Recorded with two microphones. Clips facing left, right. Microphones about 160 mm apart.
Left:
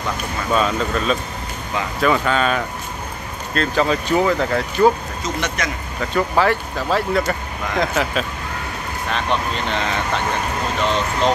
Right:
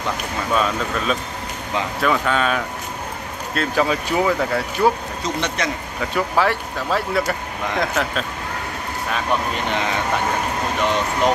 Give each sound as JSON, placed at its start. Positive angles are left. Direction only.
{"t": 0.6, "sound": "speech", "side_deg": 0}
{"t": 5.2, "sound": "speech", "side_deg": -30}
{"t": 5.9, "sound": "speech", "side_deg": 0}
{"t": 9.1, "sound": "speech", "side_deg": -10}